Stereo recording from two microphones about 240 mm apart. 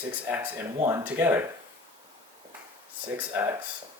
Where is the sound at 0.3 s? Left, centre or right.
Centre.